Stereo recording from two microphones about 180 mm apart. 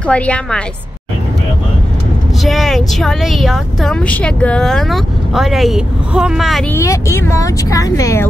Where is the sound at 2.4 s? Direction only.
Centre (ahead or behind).